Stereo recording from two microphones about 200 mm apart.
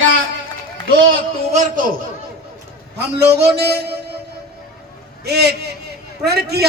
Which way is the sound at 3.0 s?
55° right (ahead or behind).